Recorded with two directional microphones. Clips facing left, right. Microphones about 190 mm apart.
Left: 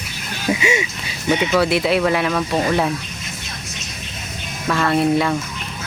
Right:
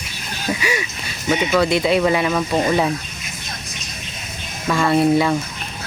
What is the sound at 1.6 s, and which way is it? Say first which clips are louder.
Speech: right 1 dB; 5° left (ahead or behind).